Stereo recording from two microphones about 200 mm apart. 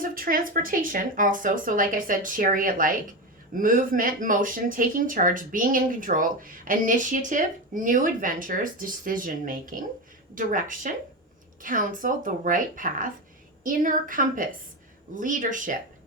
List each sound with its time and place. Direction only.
0.0 s speech: 45° right (ahead or behind)